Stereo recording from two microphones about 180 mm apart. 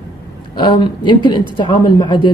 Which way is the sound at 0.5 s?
25° left (ahead or behind).